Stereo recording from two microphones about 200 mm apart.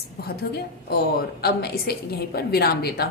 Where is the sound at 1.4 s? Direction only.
50° left (ahead or behind).